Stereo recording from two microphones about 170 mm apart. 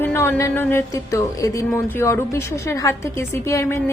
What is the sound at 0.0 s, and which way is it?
A woman's voice, 15° left (ahead or behind).